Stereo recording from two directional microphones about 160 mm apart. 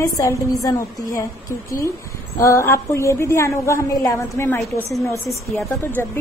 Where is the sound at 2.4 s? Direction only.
15° left (ahead or behind).